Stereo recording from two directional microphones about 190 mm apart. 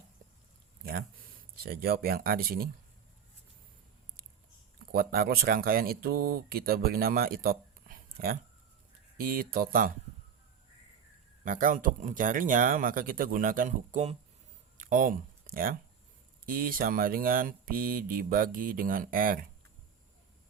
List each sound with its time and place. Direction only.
0.9 s speech: 50° right (ahead or behind)
4.9 s speech: 50° right (ahead or behind)
11.4 s speech: 45° right (ahead or behind)
14.8 s a sound: 45° right (ahead or behind)
16.5 s speech: 50° right (ahead or behind)